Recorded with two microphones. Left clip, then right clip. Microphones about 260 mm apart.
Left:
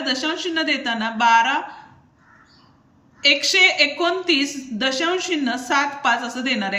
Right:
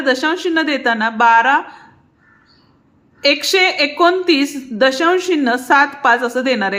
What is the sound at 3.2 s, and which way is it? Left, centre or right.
A woman's voice, centre.